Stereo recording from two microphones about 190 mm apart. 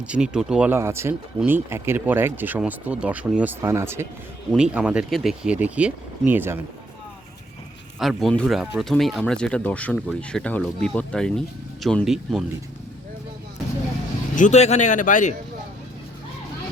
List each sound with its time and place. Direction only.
0.0 s speech: 5° right (ahead or behind)
7.9 s speech: centre (ahead or behind)
14.3 s speech: 40° left (ahead or behind)